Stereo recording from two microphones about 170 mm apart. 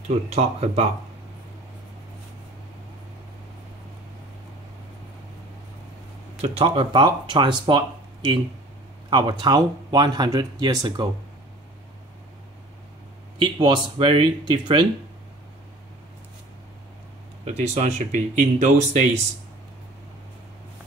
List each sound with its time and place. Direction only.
0.3 s speech: 40° right (ahead or behind)
6.4 s speech: 35° right (ahead or behind)
13.4 s speech: 25° right (ahead or behind)
17.6 s speech: 45° right (ahead or behind)